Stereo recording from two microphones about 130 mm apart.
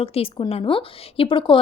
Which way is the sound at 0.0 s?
45° left (ahead or behind).